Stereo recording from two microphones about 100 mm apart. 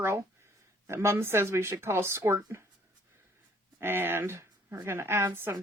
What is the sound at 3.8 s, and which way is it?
Speech, 20° right (ahead or behind).